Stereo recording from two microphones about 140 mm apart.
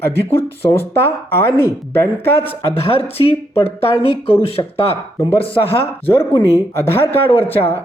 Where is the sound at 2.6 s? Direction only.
45° left (ahead or behind).